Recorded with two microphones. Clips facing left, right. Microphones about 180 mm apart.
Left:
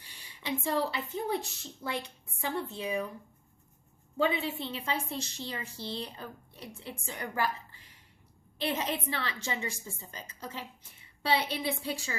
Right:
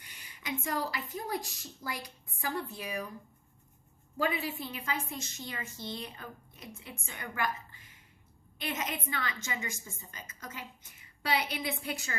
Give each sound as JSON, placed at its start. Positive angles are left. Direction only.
{"t": 0.0, "sound": "a woman's voice", "side_deg": 30}
{"t": 4.2, "sound": "a woman's voice", "side_deg": 25}